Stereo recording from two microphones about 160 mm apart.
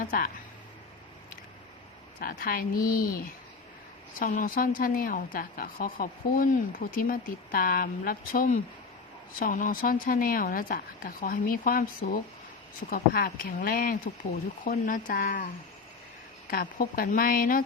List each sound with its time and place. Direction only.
0.0 s speech: 60° left (ahead or behind)
2.1 s a woman's voice: 65° left (ahead or behind)
4.3 s a woman's voice: 55° left (ahead or behind)
16.5 s a woman's voice: 65° left (ahead or behind)